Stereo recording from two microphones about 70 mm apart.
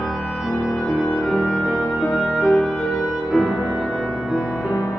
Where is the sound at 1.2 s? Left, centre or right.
Centre.